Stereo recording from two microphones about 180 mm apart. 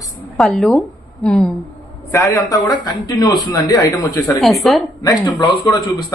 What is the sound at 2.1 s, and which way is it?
A man's voice, 20° left (ahead or behind).